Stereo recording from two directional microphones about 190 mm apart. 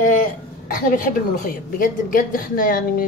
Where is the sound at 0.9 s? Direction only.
45° left (ahead or behind).